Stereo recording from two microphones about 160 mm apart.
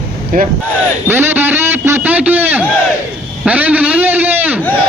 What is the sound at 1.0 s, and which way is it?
A man's voice, 15° right (ahead or behind).